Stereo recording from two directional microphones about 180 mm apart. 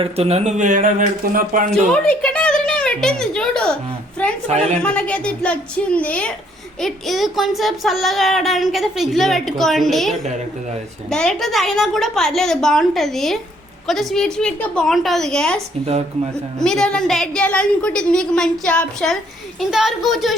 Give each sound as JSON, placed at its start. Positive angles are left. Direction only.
{"t": 0.0, "sound": "speech", "side_deg": -35}
{"t": 1.9, "sound": "a woman's voice", "side_deg": 5}
{"t": 4.4, "sound": "a woman's voice", "side_deg": -40}
{"t": 4.8, "sound": "a woman's voice", "side_deg": 5}